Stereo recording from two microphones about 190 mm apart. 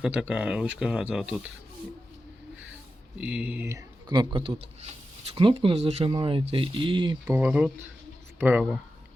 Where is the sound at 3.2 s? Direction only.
5° right (ahead or behind); by 7.3 s 25° right (ahead or behind).